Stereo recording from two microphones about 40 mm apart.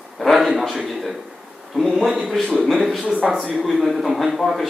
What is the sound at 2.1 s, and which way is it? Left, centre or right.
A man's voice, centre.